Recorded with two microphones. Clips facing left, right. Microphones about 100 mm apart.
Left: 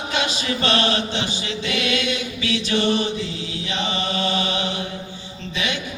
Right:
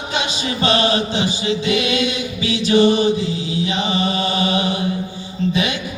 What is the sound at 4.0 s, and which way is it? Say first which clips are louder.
Mantra: right 2 dB; 10° right (ahead or behind).